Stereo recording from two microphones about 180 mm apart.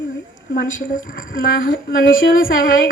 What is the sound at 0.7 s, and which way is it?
Speech, 90° left.